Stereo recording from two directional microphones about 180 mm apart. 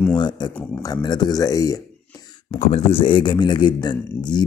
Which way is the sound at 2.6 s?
35° left (ahead or behind).